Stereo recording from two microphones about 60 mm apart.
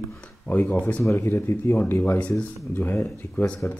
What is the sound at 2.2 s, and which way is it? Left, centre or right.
Speech, left.